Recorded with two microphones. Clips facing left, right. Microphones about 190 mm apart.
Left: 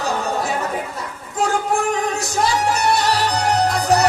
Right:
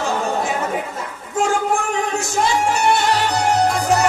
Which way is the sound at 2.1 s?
35° left (ahead or behind).